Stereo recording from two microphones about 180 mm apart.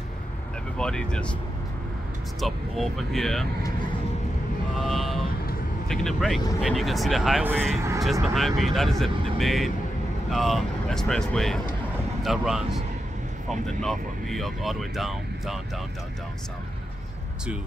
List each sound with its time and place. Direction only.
0.7 s speech: 5° left (ahead or behind)
2.4 s speech: centre (ahead or behind)
4.7 s speech: centre (ahead or behind)